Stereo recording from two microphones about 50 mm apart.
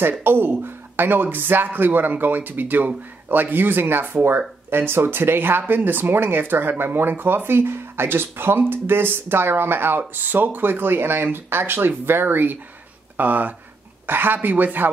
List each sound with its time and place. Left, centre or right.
0.2 s speech: right